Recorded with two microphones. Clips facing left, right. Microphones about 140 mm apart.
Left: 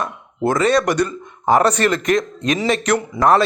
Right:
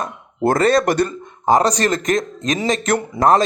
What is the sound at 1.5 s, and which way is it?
A man's voice, 35° right (ahead or behind).